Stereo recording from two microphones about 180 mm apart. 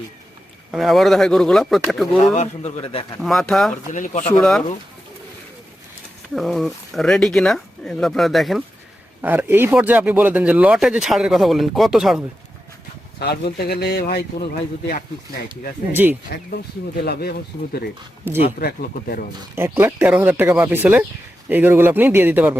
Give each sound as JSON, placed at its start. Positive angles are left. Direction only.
{"t": 0.7, "sound": "speech", "side_deg": 0}
{"t": 2.3, "sound": "a man's voice", "side_deg": 35}
{"t": 3.2, "sound": "speech", "side_deg": 0}
{"t": 3.9, "sound": "speech", "side_deg": 45}
{"t": 4.4, "sound": "speech", "side_deg": 0}
{"t": 6.3, "sound": "speech", "side_deg": 0}
{"t": 13.1, "sound": "a man's voice", "side_deg": 60}
{"t": 16.3, "sound": "a man's voice", "side_deg": 60}
{"t": 18.3, "sound": "speech", "side_deg": -10}
{"t": 18.6, "sound": "a man's voice", "side_deg": 60}
{"t": 19.5, "sound": "speech", "side_deg": -15}